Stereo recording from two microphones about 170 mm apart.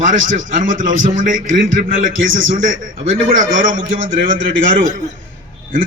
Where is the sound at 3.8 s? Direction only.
55° right (ahead or behind).